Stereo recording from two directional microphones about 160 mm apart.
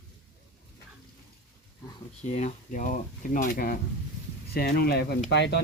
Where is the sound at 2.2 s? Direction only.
45° left (ahead or behind); by 3.7 s 65° left (ahead or behind).